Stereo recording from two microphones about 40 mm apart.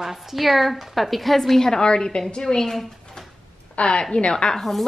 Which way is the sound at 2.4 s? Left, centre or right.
Centre.